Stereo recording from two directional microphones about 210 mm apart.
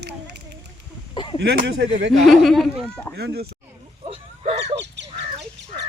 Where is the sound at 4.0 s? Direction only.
30° right (ahead or behind).